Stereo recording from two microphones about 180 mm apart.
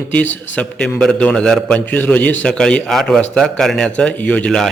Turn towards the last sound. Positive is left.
turn(degrees=5)  # may be behind; listen again after turning